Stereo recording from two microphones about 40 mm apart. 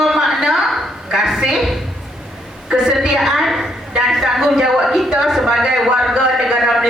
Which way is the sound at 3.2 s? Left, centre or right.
Centre.